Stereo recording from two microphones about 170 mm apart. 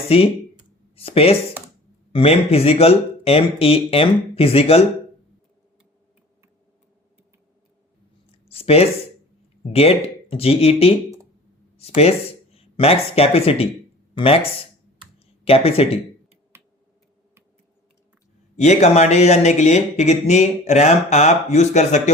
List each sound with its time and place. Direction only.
0.1 s speech: 35° left (ahead or behind)
8.3 s a sound: 35° left (ahead or behind)
9.7 s speech: 35° left (ahead or behind)
16.5 s computer keyboard: 15° right (ahead or behind)
18.5 s speech: 45° left (ahead or behind)